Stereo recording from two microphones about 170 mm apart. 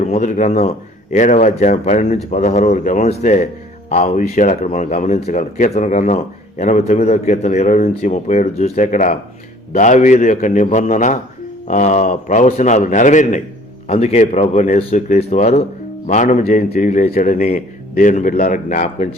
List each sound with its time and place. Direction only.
0.0 s a man's voice: 40° left (ahead or behind)